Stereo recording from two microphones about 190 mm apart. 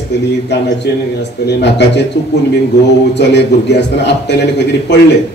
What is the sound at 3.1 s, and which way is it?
A man's voice, 65° left (ahead or behind).